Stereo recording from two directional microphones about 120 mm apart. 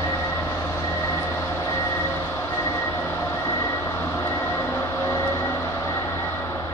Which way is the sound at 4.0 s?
25° left (ahead or behind).